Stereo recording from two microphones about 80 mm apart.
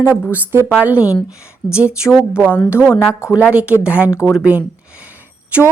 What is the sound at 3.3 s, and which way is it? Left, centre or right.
Speech, centre.